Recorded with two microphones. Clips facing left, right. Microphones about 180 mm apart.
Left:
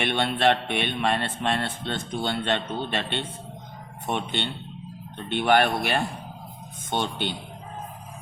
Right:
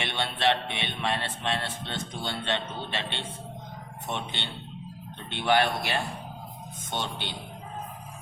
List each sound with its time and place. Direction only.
0.0 s a man's voice: 55° left (ahead or behind)